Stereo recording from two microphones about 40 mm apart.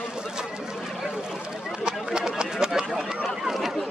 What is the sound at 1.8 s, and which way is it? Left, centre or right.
Chatter, centre.